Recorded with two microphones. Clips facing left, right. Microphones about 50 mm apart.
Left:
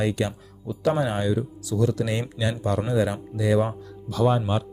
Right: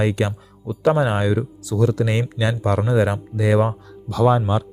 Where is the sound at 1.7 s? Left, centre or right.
Right.